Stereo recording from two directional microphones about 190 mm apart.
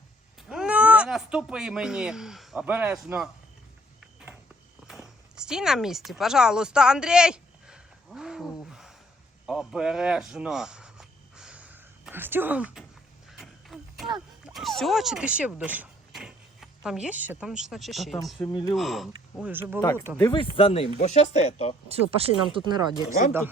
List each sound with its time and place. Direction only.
0.5 s speech: 5° right (ahead or behind)
4.9 s speech: centre (ahead or behind)
8.7 s gasp: centre (ahead or behind)
9.5 s a sound: 5° right (ahead or behind)
14.4 s speech: centre (ahead or behind)
19.8 s speech: 15° left (ahead or behind)
20.3 s speech: 30° left (ahead or behind)
22.2 s speech: 30° right (ahead or behind)
23.0 s speech: 45° left (ahead or behind)